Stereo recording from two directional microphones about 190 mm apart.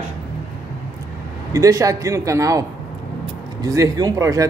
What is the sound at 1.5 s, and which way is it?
Speech, 15° right (ahead or behind).